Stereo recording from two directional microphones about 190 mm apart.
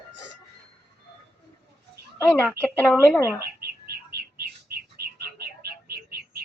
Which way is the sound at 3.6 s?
55° right (ahead or behind).